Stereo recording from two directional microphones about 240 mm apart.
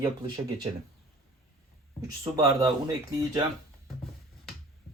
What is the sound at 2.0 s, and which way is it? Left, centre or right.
Speech, centre.